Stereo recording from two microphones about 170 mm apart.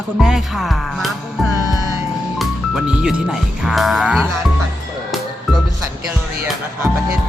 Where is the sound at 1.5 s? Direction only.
20° right (ahead or behind).